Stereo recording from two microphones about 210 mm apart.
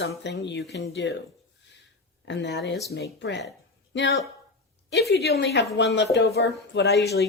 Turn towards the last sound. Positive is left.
turn(degrees=50)  # may be behind; listen again after turning